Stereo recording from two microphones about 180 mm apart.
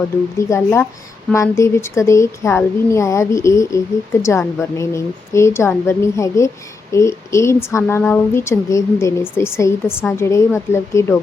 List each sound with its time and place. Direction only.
0.3 s speech: 15° left (ahead or behind)